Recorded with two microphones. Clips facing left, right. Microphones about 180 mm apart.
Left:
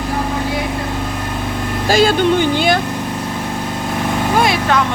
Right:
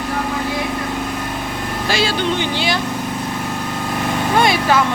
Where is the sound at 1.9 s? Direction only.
45° left (ahead or behind).